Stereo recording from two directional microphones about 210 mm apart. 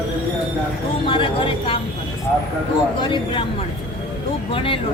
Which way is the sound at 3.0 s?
25° left (ahead or behind).